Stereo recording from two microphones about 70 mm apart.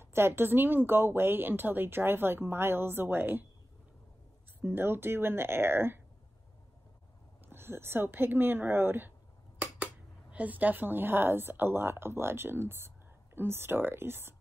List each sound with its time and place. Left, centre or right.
0.0 s speech: right
4.6 s speech: right
7.4 s speech: right
10.3 s speech: right